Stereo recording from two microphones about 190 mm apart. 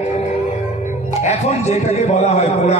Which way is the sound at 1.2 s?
35° left (ahead or behind).